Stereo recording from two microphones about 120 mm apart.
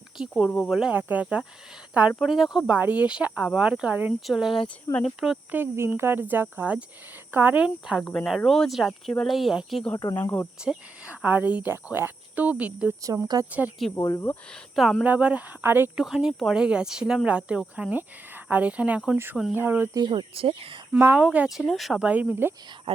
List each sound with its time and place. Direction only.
0.2 s speech: 5° right (ahead or behind)
4.3 s speech: centre (ahead or behind)
5.5 s speech: 20° right (ahead or behind)
8.0 s speech: 5° left (ahead or behind)
10.2 s cricket: 15° left (ahead or behind)
10.6 s speech: 10° right (ahead or behind)
13.0 s speech: 30° right (ahead or behind)
13.9 s speech: 30° left (ahead or behind)
14.5 s speech: centre (ahead or behind)
15.0 s speech: 10° right (ahead or behind)
16.0 s speech: 5° right (ahead or behind)
19.9 s speech: 40° right (ahead or behind)
20.9 s speech: 10° right (ahead or behind)